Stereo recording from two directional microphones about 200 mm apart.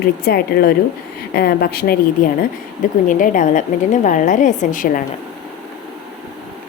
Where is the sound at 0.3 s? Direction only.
50° left (ahead or behind).